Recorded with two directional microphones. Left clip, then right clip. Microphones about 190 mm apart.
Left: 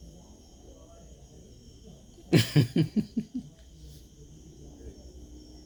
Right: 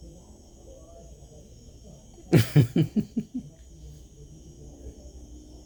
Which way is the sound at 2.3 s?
30° right (ahead or behind).